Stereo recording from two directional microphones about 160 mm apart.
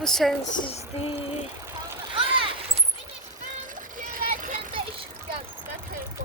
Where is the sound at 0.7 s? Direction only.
40° left (ahead or behind).